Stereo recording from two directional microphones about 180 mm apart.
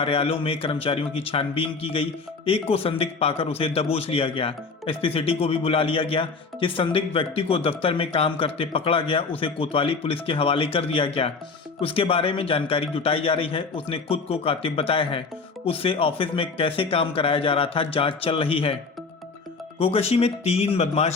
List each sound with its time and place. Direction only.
0.0 s a man's voice: 30° left (ahead or behind)
19.8 s a man's voice: 35° left (ahead or behind)